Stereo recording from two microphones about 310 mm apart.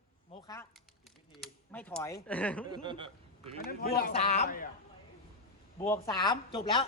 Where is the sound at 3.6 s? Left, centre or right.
Left.